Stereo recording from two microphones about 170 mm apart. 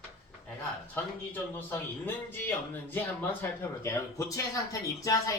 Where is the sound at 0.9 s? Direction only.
10° left (ahead or behind).